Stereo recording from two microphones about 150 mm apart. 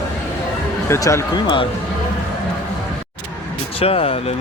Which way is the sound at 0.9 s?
20° left (ahead or behind).